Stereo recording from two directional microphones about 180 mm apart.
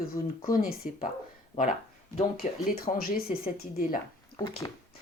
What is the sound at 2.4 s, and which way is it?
Speech, 55° left (ahead or behind).